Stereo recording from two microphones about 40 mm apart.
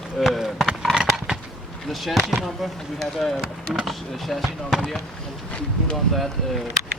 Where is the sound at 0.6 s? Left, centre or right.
Centre.